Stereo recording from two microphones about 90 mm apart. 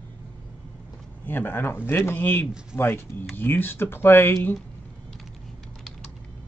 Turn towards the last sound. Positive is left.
turn(degrees=25)  # may be behind; listen again after turning